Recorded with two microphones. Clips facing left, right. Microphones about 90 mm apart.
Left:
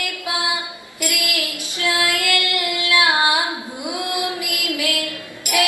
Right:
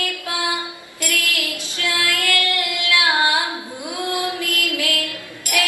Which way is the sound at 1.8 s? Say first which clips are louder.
Left 2 dB; 20° left (ahead or behind).